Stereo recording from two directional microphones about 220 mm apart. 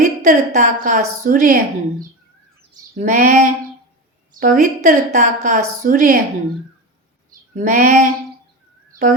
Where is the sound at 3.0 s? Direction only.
40° right (ahead or behind).